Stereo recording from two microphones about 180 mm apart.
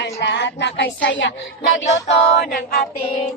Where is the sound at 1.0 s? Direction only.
85° left.